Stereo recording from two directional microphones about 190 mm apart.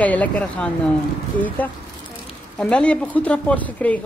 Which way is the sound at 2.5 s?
5° left (ahead or behind).